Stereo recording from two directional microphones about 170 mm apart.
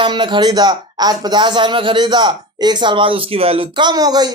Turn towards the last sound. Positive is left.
turn(degrees=-25)  # may be behind; listen again after turning